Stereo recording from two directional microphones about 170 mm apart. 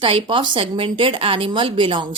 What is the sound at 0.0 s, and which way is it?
Speech, 30° right (ahead or behind).